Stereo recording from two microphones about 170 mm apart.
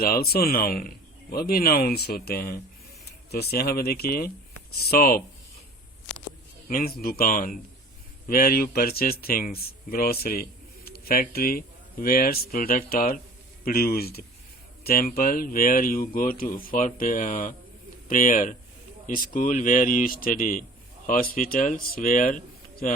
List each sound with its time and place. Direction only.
0.0 s speech: 60° left (ahead or behind)
6.7 s speech: 60° left (ahead or behind)